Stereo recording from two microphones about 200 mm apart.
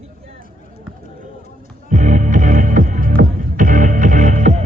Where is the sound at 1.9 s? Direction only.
40° right (ahead or behind).